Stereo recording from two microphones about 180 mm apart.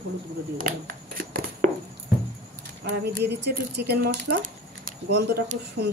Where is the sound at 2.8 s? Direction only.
65° right (ahead or behind).